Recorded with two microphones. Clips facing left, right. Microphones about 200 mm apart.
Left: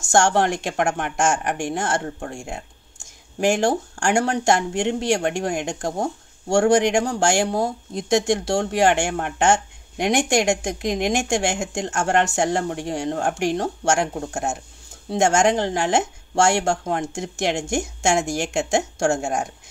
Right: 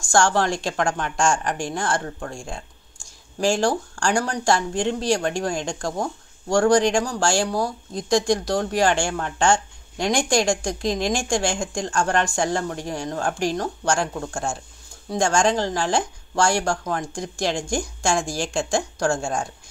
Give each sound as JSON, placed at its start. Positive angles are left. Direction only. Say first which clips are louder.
{"t": 0.0, "sound": "speech", "louder": "left 2 dB", "side_deg": 20}